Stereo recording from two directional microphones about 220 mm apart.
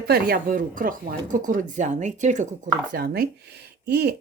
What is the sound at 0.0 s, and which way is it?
Speech, 45° right (ahead or behind).